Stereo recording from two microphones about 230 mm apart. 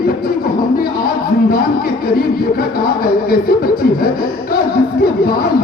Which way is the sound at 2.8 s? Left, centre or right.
Left.